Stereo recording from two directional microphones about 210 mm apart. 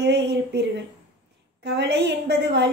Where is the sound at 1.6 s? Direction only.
55° right (ahead or behind).